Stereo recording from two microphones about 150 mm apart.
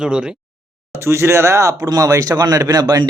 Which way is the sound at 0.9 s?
15° right (ahead or behind).